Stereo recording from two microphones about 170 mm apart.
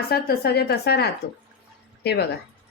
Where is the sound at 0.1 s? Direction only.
65° left (ahead or behind).